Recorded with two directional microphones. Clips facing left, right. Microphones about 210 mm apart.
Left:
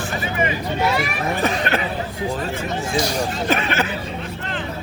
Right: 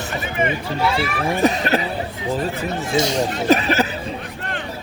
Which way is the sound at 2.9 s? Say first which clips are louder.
Right 3 dB; 25° right (ahead or behind).